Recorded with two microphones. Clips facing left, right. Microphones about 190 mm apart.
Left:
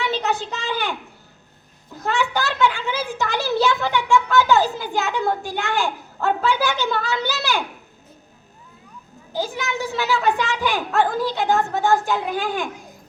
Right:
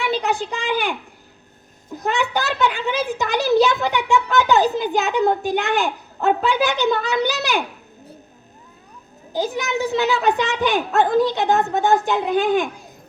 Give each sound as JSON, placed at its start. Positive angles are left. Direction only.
{"t": 0.0, "sound": "a woman's voice", "side_deg": -10}
{"t": 9.3, "sound": "a woman's voice", "side_deg": -20}